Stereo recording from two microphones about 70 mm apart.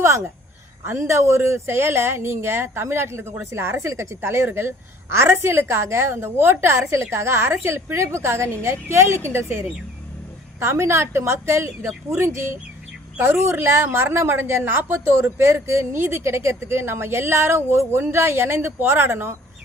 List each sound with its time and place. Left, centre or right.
0.9 s a woman's voice: right